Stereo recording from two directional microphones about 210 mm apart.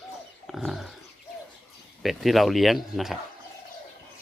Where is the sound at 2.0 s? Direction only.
Centre (ahead or behind).